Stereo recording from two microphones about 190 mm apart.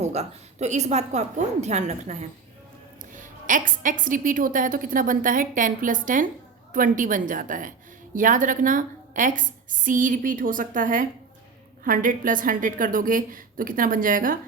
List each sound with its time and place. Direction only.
0.0 s a woman's voice: 35° right (ahead or behind)